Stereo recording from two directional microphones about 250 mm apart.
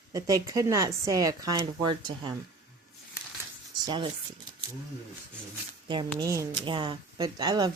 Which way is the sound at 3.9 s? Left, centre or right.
Centre.